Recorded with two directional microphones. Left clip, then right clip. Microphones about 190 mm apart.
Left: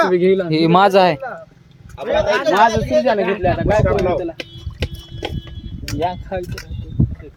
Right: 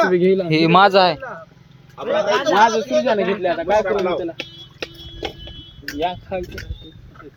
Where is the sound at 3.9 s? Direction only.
5° right (ahead or behind).